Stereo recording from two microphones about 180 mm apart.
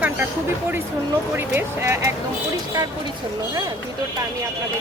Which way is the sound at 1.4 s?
15° right (ahead or behind).